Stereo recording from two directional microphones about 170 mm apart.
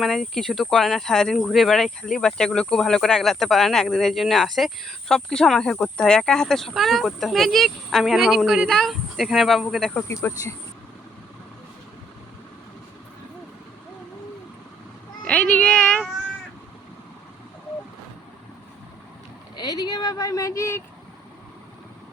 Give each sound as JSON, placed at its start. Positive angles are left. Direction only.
{"t": 0.0, "sound": "speech", "side_deg": 0}
{"t": 9.9, "sound": "speech", "side_deg": 15}
{"t": 15.2, "sound": "cat", "side_deg": 5}
{"t": 19.5, "sound": "a sound", "side_deg": 25}